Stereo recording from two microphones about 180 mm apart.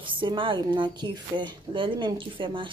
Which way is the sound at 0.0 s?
25° right (ahead or behind).